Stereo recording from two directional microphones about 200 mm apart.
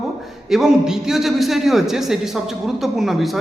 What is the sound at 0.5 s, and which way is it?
A man's voice, centre (ahead or behind).